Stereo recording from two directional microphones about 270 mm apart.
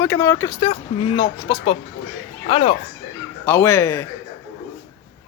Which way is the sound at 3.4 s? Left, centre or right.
Centre.